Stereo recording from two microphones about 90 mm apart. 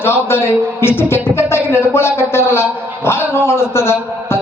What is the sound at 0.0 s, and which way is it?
A man's voice, 25° left (ahead or behind).